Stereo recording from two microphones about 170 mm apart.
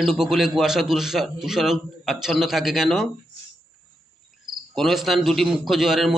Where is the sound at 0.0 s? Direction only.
Centre (ahead or behind).